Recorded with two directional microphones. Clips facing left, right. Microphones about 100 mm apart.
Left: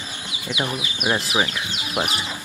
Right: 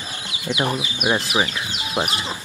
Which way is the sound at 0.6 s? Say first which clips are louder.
Right 3 dB; 35° right (ahead or behind).